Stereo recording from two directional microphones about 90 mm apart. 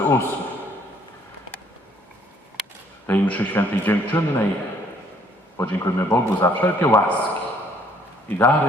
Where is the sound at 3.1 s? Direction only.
15° left (ahead or behind).